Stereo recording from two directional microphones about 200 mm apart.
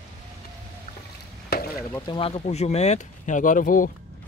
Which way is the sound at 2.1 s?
25° left (ahead or behind).